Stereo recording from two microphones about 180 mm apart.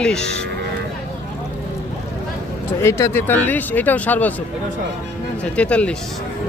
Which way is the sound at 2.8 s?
15° left (ahead or behind).